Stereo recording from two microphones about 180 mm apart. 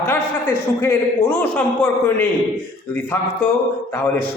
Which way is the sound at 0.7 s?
15° left (ahead or behind).